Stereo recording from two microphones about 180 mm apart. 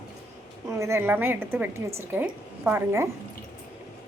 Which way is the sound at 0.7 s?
15° right (ahead or behind).